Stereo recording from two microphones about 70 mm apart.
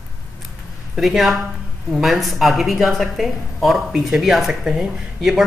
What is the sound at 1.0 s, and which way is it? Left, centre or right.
A man's voice, centre.